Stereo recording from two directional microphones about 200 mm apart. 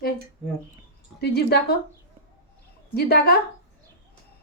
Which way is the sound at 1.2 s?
55° left (ahead or behind).